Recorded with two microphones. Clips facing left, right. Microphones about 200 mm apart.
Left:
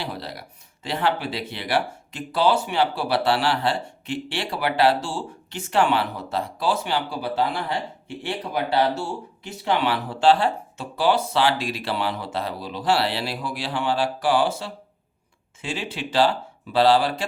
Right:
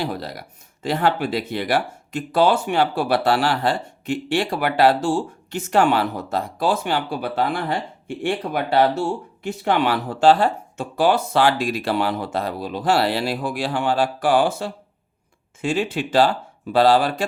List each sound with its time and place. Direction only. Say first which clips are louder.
0.0 s speech: right 5 dB; 45° right (ahead or behind)